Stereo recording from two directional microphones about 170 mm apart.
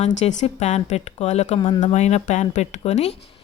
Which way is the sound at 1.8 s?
40° left (ahead or behind).